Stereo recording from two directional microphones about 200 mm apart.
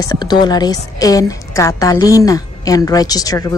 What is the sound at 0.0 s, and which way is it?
A woman's voice, 20° left (ahead or behind).